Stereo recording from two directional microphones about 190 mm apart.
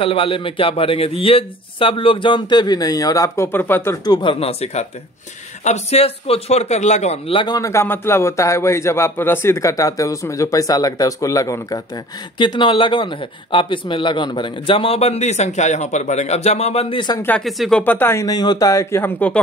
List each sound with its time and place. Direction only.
0.0 s a man's voice: 30° left (ahead or behind)
17.5 s a man's voice: centre (ahead or behind)